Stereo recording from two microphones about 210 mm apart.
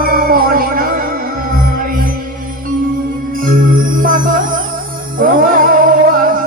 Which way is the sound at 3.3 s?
40° right (ahead or behind).